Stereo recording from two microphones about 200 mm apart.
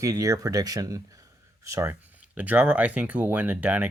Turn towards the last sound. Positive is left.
turn(degrees=-10)  # may be behind; listen again after turning